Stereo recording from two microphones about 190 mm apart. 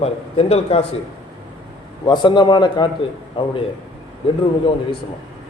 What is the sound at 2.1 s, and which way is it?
Speech, 25° left (ahead or behind).